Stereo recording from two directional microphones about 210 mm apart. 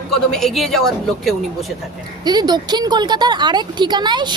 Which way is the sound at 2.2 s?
20° right (ahead or behind).